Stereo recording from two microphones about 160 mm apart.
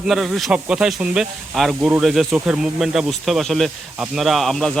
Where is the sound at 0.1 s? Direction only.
Centre (ahead or behind).